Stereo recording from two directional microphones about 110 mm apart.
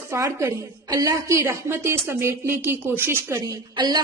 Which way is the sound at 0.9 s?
35° right (ahead or behind).